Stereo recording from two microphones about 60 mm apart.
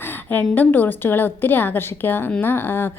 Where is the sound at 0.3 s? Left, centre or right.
Left.